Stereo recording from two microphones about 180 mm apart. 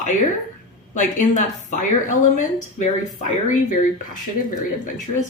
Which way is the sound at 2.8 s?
45° left (ahead or behind).